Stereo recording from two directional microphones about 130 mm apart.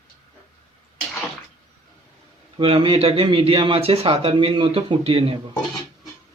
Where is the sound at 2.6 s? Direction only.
40° right (ahead or behind).